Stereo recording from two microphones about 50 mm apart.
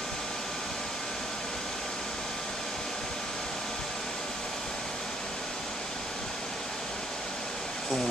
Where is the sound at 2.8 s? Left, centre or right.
Centre.